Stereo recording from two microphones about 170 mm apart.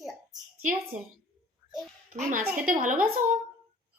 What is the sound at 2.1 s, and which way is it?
Speech, 50° right (ahead or behind).